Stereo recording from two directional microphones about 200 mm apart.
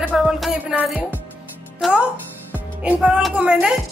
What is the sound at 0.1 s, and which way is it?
Music, centre (ahead or behind).